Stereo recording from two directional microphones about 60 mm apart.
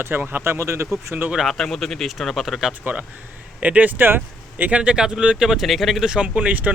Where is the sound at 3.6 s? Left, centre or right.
Right.